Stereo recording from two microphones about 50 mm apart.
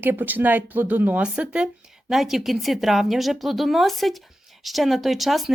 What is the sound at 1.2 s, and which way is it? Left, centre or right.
Speech, right.